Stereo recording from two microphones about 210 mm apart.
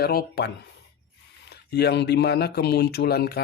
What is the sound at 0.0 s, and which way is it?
Speech, 50° left (ahead or behind).